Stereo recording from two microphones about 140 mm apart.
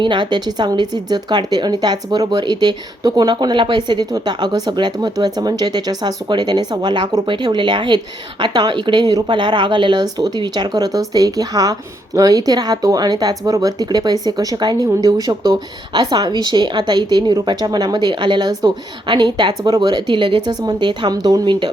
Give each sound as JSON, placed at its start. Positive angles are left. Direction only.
{"t": 0.0, "sound": "a woman's voice", "side_deg": -35}